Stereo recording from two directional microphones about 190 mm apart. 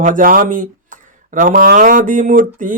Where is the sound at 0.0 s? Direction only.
45° right (ahead or behind).